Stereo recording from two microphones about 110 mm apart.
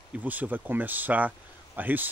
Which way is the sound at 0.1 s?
15° right (ahead or behind).